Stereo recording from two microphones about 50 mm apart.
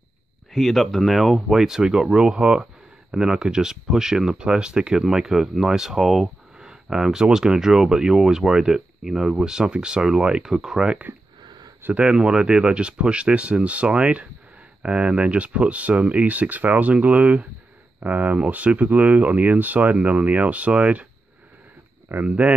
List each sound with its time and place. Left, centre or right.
0.5 s speech: centre
5.0 s speech: centre; by 21.1 s right
22.1 s speech: right